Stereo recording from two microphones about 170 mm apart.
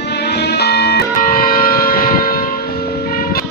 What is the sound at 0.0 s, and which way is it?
Music, 75° left (ahead or behind).